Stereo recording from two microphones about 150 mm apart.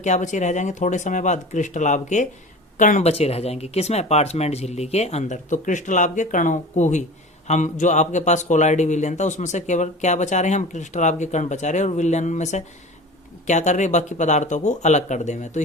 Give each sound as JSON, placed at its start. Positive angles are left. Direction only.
{"t": 0.0, "sound": "speech", "side_deg": 55}